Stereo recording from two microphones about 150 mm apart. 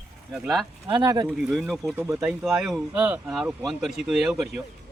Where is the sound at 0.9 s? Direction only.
30° right (ahead or behind).